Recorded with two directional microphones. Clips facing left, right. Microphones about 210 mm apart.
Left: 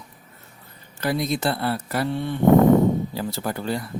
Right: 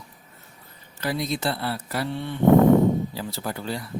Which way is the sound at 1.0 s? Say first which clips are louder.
Left 3 dB; 50° left (ahead or behind).